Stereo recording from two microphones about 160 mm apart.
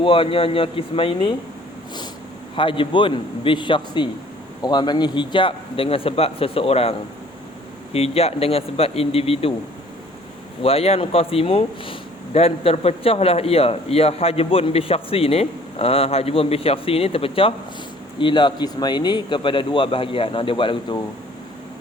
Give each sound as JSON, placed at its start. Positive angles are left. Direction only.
{"t": 0.0, "sound": "speech", "side_deg": 35}
{"t": 2.6, "sound": "speech", "side_deg": 30}
{"t": 7.9, "sound": "speech", "side_deg": 40}
{"t": 10.6, "sound": "speech", "side_deg": 35}